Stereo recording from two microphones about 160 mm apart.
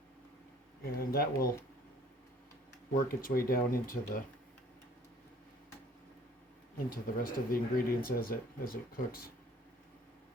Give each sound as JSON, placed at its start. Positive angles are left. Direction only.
{"t": 0.8, "sound": "speech", "side_deg": 70}
{"t": 2.9, "sound": "speech", "side_deg": 60}
{"t": 6.9, "sound": "speech", "side_deg": 65}